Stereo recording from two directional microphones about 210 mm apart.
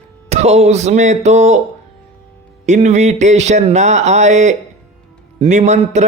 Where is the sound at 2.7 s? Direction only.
35° right (ahead or behind).